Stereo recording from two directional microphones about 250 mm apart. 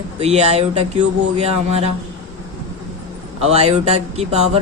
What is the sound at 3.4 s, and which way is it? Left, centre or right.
Speech, right.